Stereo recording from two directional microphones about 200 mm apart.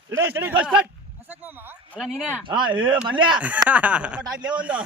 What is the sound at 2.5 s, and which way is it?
Speech, 25° right (ahead or behind).